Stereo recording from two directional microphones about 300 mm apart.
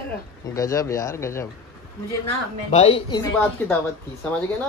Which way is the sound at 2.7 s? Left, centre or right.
Centre.